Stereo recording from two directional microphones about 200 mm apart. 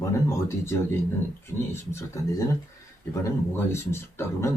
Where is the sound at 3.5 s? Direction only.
15° left (ahead or behind).